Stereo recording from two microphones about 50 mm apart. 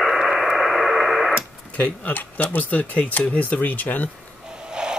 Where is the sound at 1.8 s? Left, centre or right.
Left.